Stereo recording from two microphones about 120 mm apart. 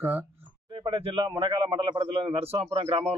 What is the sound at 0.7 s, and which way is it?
Speech, 45° right (ahead or behind).